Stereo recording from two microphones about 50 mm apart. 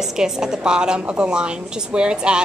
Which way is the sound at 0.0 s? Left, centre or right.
Centre.